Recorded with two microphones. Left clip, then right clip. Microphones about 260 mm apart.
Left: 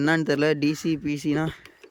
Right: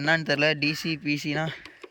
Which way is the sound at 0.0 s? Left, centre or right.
Centre.